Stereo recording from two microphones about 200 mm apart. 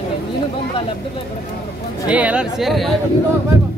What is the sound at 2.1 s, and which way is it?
Speech, 5° right (ahead or behind).